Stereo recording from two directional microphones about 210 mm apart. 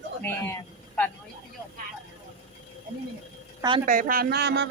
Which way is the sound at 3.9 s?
40° right (ahead or behind).